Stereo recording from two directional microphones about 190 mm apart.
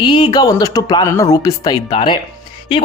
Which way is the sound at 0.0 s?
25° left (ahead or behind).